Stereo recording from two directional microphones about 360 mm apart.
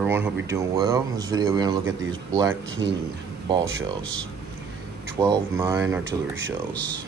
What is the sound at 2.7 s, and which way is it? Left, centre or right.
Speech, right.